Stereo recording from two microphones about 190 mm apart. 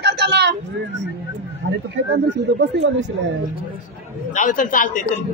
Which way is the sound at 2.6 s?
65° right (ahead or behind).